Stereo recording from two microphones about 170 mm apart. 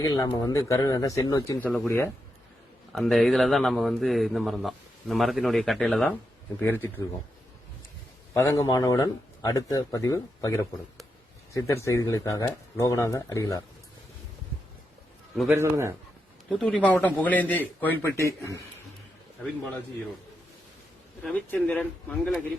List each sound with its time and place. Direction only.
0.0 s speech: 20° left (ahead or behind)
1.5 s a man's voice: 5° left (ahead or behind)
2.9 s a man's voice: centre (ahead or behind)
6.6 s a man's voice: 15° left (ahead or behind)
8.3 s speech: 15° left (ahead or behind)
15.5 s speech: 15° right (ahead or behind)
16.5 s a man's voice: 5° left (ahead or behind)
21.2 s a man's voice: 10° left (ahead or behind)